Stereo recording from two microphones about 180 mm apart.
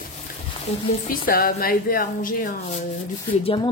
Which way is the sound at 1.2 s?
55° left (ahead or behind).